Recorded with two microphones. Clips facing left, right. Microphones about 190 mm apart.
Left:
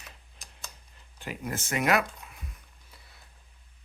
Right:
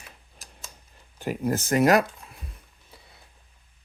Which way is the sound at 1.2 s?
40° right (ahead or behind).